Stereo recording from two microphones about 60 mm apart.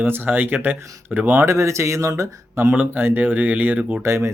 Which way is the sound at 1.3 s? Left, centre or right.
Right.